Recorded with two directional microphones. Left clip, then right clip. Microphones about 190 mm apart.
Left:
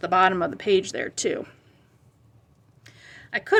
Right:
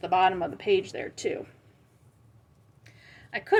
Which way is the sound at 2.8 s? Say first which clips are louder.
Left 6 dB; 20° left (ahead or behind).